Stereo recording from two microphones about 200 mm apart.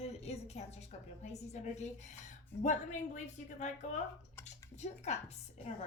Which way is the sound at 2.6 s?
35° left (ahead or behind).